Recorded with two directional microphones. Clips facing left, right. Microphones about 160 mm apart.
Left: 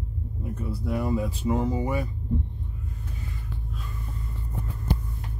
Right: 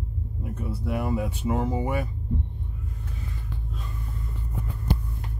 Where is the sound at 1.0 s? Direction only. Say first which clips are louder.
Left 1 dB; 10° right (ahead or behind).